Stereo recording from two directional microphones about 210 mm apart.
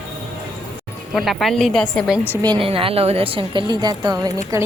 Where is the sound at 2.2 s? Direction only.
20° right (ahead or behind).